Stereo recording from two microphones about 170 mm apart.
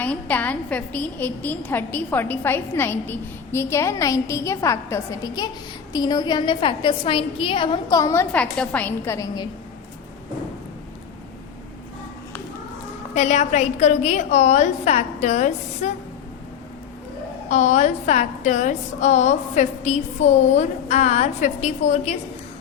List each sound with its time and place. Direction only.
0.0 s a woman's voice: 10° left (ahead or behind)
13.1 s a woman's voice: 45° left (ahead or behind)
17.5 s a woman's voice: 45° left (ahead or behind)